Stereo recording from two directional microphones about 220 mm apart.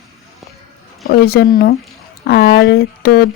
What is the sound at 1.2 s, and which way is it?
A woman's voice, 45° left (ahead or behind).